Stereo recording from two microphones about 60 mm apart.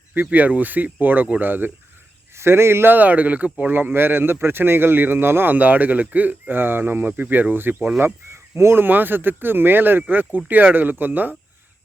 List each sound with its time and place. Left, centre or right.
0.1 s speech: right
2.4 s speech: right